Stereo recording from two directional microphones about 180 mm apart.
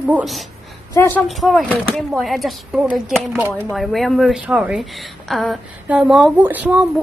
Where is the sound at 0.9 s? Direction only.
10° left (ahead or behind).